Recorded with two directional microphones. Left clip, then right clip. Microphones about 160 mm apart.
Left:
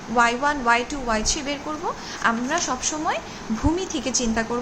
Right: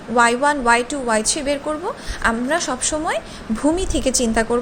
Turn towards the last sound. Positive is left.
turn(degrees=-40)  # may be behind; listen again after turning